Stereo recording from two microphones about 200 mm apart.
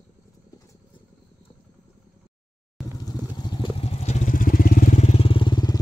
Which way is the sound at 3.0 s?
20° left (ahead or behind).